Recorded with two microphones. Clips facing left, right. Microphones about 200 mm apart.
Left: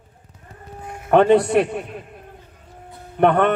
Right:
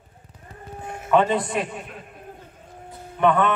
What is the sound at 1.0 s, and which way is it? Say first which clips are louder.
Speech: left 6 dB; 65° left (ahead or behind).